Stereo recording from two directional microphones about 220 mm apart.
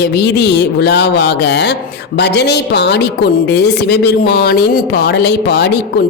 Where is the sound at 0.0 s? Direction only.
50° left (ahead or behind).